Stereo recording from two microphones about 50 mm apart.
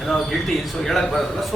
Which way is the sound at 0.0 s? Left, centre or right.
Centre.